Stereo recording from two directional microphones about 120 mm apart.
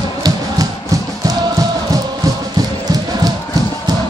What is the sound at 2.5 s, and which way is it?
Chant, 35° right (ahead or behind).